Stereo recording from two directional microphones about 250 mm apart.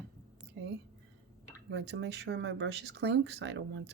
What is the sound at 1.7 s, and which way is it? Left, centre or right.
Speech, right.